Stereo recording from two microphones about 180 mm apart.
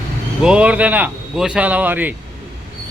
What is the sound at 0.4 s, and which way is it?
Speech, 5° right (ahead or behind).